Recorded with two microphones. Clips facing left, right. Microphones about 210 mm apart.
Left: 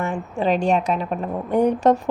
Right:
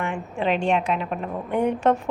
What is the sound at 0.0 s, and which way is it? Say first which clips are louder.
A woman's voice: left 3 dB; 40° left (ahead or behind).